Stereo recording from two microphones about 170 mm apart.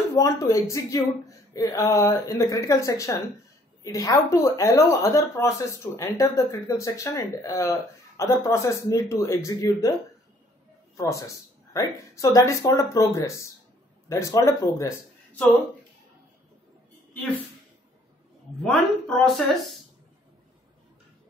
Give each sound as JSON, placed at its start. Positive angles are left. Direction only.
{"t": 0.1, "sound": "a woman's voice", "side_deg": 20}
{"t": 11.0, "sound": "a woman's voice", "side_deg": 20}
{"t": 18.6, "sound": "speech", "side_deg": 5}